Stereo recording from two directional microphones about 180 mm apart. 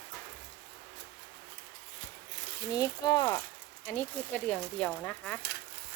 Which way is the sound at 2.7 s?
20° left (ahead or behind).